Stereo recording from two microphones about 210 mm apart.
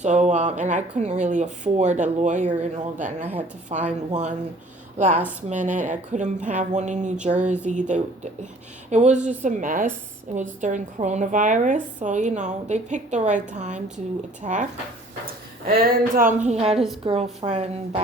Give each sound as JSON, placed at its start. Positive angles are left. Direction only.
{"t": 0.0, "sound": "speech", "side_deg": -35}
{"t": 3.2, "sound": "a woman's voice", "side_deg": -10}
{"t": 3.7, "sound": "a woman's voice", "side_deg": -35}